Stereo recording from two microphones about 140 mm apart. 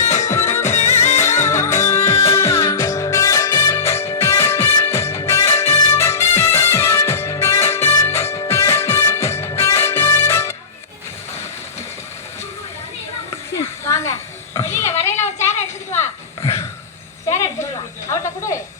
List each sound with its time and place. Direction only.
0.0 s music: 55° left (ahead or behind)
0.3 s music: 20° left (ahead or behind)
0.6 s music: 55° left (ahead or behind)
1.5 s music: 20° left (ahead or behind)
13.8 s a sound: 20° left (ahead or behind)
18.1 s a sound: 20° left (ahead or behind)